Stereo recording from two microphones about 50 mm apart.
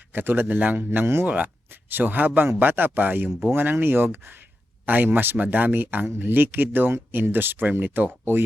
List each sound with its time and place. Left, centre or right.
0.1 s a man's voice: right
0.4 s speech: right
0.9 s speech: right
1.3 s speech: right